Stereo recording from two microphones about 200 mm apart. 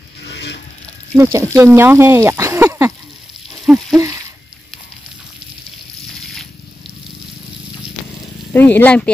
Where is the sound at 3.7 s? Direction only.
5° right (ahead or behind).